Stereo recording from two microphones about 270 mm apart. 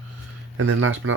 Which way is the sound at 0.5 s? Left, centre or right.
Right.